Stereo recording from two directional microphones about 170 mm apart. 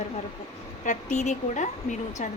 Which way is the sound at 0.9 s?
45° left (ahead or behind).